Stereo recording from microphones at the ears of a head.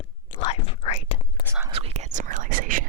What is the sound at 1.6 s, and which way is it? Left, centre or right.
Whispering, right.